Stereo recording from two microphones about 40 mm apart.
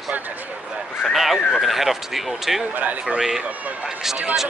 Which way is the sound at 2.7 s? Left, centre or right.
Right.